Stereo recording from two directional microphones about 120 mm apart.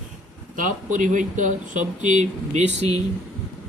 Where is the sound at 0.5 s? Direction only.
90° right; by 3.0 s 65° right (ahead or behind).